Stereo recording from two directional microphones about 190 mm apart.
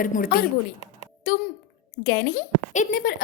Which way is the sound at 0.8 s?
40° left (ahead or behind).